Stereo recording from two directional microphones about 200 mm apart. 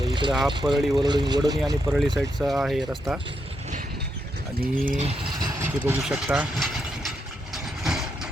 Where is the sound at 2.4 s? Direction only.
Centre (ahead or behind).